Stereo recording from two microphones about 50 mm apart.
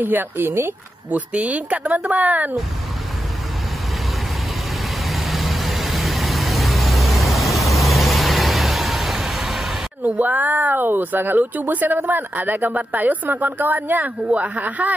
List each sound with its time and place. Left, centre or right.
0.0 s speech: right
1.1 s speech: right
5.0 s vehicle: centre
10.0 s speech: right